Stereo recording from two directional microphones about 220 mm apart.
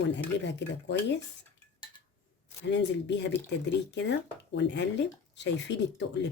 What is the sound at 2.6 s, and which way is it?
Speech, 50° left (ahead or behind).